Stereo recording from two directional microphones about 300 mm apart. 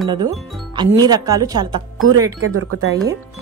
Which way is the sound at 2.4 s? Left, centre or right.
Right.